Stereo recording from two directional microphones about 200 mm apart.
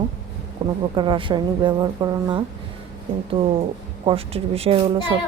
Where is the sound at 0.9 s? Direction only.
25° right (ahead or behind).